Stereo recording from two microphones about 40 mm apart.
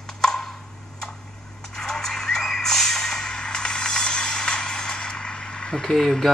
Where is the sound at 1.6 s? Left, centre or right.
Centre.